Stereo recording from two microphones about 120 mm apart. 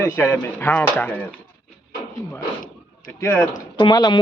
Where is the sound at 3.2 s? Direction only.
15° left (ahead or behind).